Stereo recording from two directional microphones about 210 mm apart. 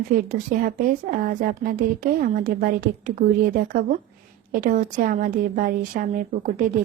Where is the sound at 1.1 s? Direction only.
40° right (ahead or behind).